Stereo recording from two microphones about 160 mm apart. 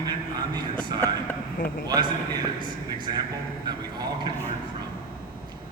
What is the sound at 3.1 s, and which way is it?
Speech, 25° right (ahead or behind).